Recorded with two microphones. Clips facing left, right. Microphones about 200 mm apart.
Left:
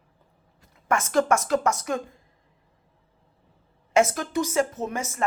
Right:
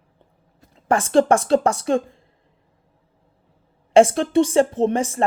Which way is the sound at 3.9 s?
30° right (ahead or behind).